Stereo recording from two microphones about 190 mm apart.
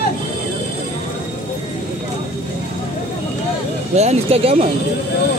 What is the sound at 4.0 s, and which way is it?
Speech, 35° right (ahead or behind).